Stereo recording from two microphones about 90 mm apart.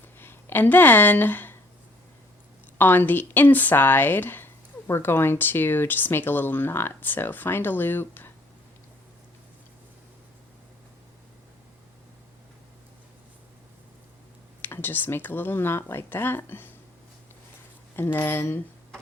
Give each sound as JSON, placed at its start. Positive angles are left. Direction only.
{"t": 0.2, "sound": "speech", "side_deg": 25}
{"t": 2.7, "sound": "speech", "side_deg": 20}
{"t": 14.6, "sound": "speech", "side_deg": 25}
{"t": 17.9, "sound": "speech", "side_deg": 25}